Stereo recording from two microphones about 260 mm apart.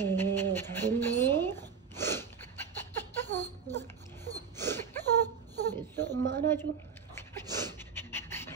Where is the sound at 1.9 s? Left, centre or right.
Centre.